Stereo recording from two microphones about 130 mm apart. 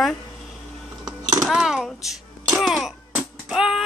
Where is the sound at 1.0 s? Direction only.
25° right (ahead or behind).